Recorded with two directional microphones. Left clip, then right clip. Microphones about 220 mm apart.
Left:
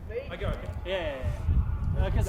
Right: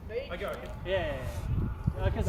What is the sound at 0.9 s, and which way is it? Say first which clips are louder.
Speech: even; 50° left (ahead or behind).